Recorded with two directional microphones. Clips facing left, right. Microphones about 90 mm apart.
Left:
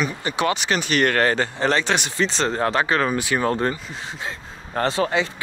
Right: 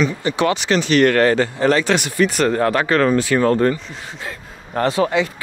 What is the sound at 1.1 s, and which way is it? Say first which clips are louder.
Speech: right 5 dB; 30° left (ahead or behind).